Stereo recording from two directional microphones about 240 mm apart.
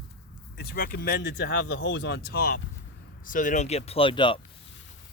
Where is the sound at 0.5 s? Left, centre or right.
Left; by 4.4 s centre.